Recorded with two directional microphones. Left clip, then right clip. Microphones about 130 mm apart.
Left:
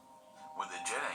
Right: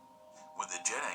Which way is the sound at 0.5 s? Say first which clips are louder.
Right 1 dB; 30° right (ahead or behind).